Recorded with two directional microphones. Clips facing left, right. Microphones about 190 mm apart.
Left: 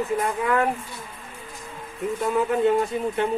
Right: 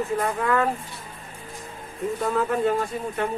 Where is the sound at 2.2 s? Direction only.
20° left (ahead or behind).